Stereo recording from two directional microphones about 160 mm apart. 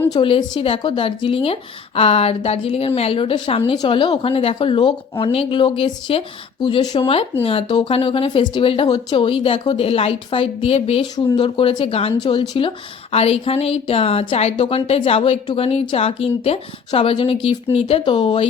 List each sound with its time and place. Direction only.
0.1 s speech: 30° left (ahead or behind)